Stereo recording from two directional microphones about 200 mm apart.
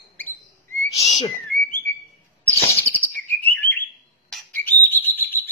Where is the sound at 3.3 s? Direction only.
10° left (ahead or behind).